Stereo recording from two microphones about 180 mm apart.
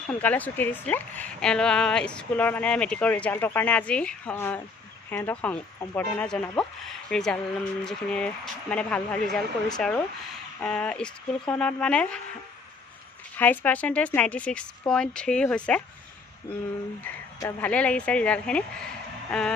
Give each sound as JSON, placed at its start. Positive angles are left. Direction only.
{"t": 0.2, "sound": "a woman's voice", "side_deg": 10}
{"t": 13.4, "sound": "a woman's voice", "side_deg": 10}
{"t": 17.0, "sound": "a woman's voice", "side_deg": 10}